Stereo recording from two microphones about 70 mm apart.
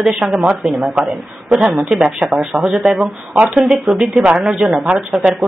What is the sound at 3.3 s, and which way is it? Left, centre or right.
Speech, right.